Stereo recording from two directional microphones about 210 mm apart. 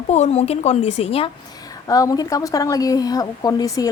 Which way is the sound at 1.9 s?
15° left (ahead or behind).